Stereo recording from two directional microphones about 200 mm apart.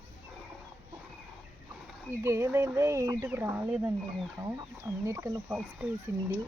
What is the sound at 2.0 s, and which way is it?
Speech, 15° right (ahead or behind).